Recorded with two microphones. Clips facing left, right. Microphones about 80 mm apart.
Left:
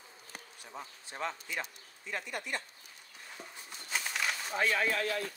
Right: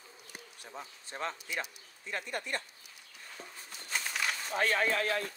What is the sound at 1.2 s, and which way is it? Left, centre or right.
Speech, right.